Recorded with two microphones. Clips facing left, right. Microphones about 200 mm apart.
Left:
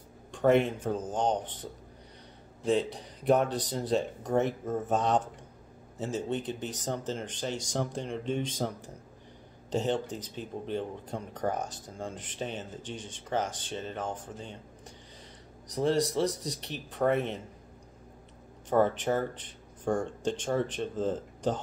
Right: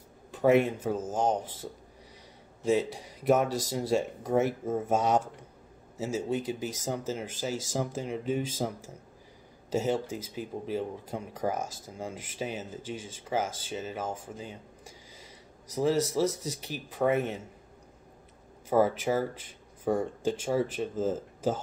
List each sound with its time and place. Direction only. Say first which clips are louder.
0.3 s speech: right 1 dB; 5° right (ahead or behind)
15.7 s speech: right 1 dB; 5° right (ahead or behind)
18.7 s speech: right 1 dB; 5° right (ahead or behind)